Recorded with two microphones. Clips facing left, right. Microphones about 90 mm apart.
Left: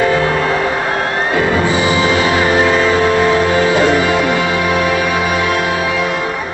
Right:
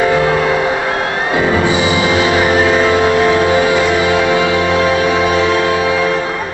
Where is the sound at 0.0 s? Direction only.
15° right (ahead or behind).